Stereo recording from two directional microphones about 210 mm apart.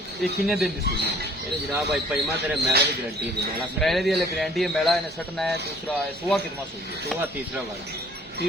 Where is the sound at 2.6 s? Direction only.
50° right (ahead or behind).